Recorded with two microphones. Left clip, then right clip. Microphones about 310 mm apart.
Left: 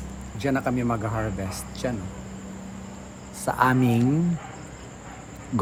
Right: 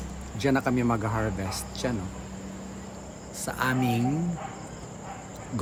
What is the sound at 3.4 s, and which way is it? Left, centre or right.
Speech, centre.